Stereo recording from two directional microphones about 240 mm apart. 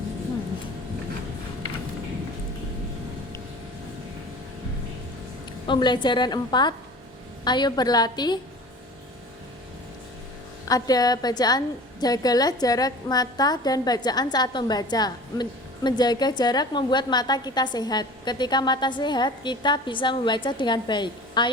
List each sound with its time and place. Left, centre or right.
5.6 s a woman's voice: centre
10.7 s a woman's voice: centre